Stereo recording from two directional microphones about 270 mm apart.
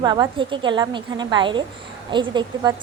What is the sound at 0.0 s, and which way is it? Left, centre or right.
A woman's voice, centre.